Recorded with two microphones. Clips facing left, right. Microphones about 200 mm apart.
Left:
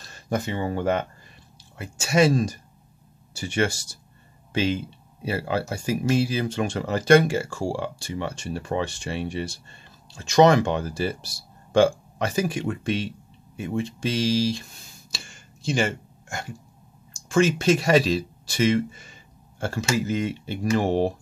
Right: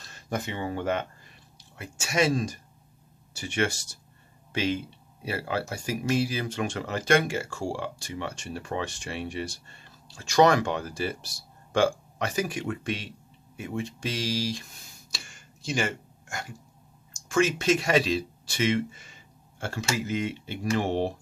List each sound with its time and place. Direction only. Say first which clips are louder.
0.3 s speech: left 5 dB; 35° left (ahead or behind)
15.0 s a sound: left 3 dB; 30° left (ahead or behind)
17.1 s speech: left 4 dB; 30° left (ahead or behind)